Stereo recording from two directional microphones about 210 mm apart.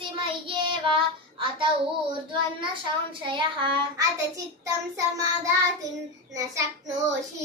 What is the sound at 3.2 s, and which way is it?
Child singing, 25° right (ahead or behind).